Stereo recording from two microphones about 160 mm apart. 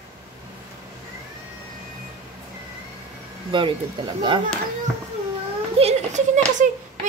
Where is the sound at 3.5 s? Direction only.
30° right (ahead or behind).